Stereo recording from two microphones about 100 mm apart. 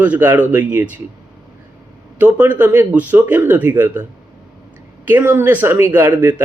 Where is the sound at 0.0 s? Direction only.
20° right (ahead or behind).